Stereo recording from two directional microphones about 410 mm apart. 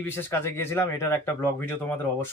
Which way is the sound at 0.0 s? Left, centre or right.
Centre.